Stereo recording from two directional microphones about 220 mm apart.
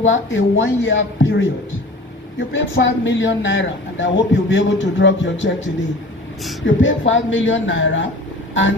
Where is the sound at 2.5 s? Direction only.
55° left (ahead or behind).